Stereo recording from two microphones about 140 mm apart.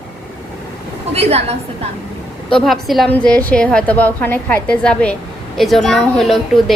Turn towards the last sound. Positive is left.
turn(degrees=0)  # may be behind; listen again after turning